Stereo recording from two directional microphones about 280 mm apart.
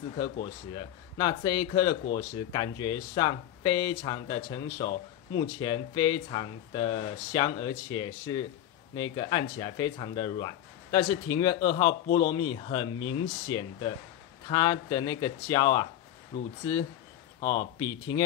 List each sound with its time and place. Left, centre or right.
0.2 s speech: centre
17.5 s speech: centre